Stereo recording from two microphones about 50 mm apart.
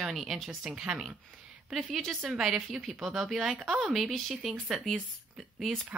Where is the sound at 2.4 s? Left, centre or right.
Centre.